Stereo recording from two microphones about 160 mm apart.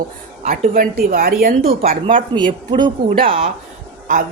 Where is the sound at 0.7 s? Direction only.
60° right (ahead or behind).